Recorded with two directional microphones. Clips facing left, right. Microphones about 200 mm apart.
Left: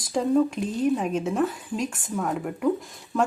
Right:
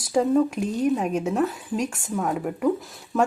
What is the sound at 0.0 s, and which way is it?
Speech, 5° right (ahead or behind).